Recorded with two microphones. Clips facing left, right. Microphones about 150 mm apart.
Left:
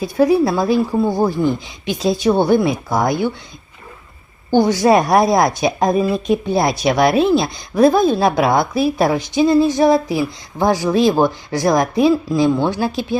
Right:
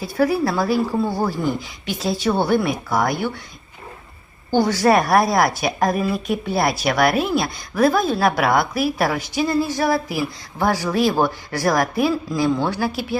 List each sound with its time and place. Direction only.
0.0 s a woman's voice: 20° left (ahead or behind)
4.5 s a woman's voice: 15° left (ahead or behind)